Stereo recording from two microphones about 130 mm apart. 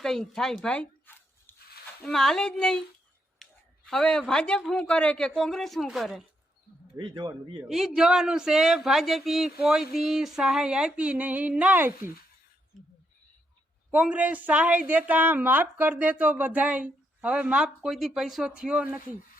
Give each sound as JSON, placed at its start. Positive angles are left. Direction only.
{"t": 0.0, "sound": "zipper", "side_deg": 5}
{"t": 2.0, "sound": "speech", "side_deg": 5}
{"t": 3.4, "sound": "a sound", "side_deg": 0}
{"t": 3.8, "sound": "speech", "side_deg": 5}
{"t": 6.9, "sound": "speech", "side_deg": -35}
{"t": 7.3, "sound": "a man's voice", "side_deg": -25}
{"t": 7.7, "sound": "speech", "side_deg": -5}
{"t": 13.9, "sound": "a woman's voice", "side_deg": -10}